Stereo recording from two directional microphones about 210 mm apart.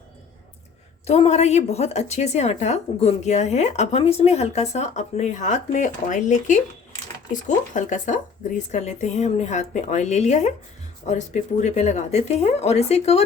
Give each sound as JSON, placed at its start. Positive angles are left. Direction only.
{"t": 1.0, "sound": "a woman's voice", "side_deg": 30}